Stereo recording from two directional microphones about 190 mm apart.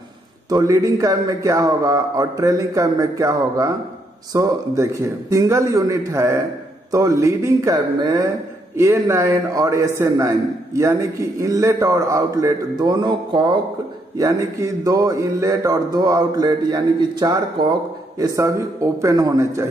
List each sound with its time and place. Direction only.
0.5 s a man's voice: 20° right (ahead or behind)